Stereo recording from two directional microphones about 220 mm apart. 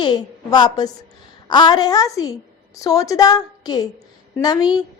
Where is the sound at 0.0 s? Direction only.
20° left (ahead or behind).